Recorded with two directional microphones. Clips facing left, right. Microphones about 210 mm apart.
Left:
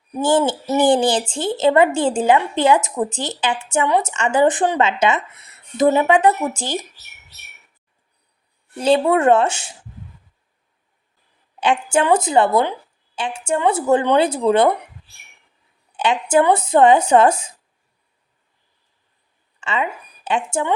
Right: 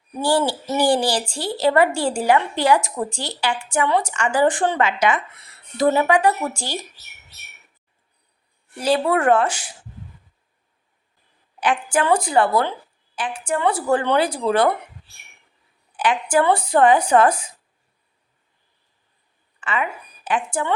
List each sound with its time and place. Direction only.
0.2 s a woman's voice: 20° left (ahead or behind)
8.8 s a woman's voice: 25° left (ahead or behind)
11.6 s a woman's voice: 25° left (ahead or behind)
16.0 s a woman's voice: 25° left (ahead or behind)
19.5 s speech: 25° left (ahead or behind)